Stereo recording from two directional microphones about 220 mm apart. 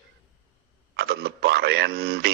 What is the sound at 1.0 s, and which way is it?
Speech, 45° right (ahead or behind).